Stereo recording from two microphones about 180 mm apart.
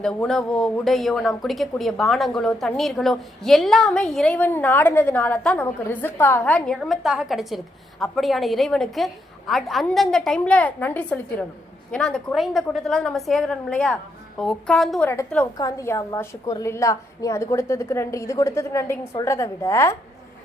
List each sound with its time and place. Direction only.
0.0 s speech: 5° left (ahead or behind)
15.1 s a woman's voice: 10° left (ahead or behind)